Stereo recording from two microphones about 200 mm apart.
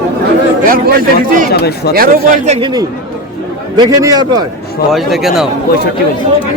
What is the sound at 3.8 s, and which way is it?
Speech, 20° right (ahead or behind).